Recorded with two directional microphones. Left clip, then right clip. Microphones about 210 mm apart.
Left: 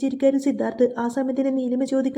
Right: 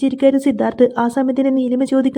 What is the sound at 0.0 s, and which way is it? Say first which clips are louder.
Speech: right 6 dB; 30° right (ahead or behind).